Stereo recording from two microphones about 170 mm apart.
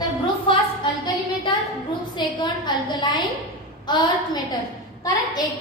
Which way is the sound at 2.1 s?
25° left (ahead or behind).